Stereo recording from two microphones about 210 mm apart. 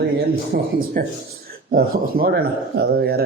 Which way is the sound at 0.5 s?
45° right (ahead or behind).